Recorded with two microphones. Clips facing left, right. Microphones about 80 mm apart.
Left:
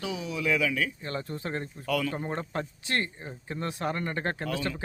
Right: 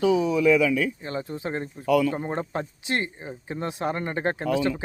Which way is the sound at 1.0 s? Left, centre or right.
Centre.